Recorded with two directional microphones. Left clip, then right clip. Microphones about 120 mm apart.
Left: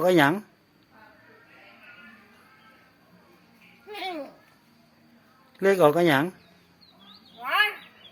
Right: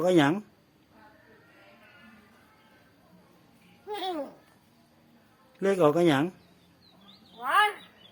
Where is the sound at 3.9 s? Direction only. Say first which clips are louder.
Right 1 dB; 50° right (ahead or behind).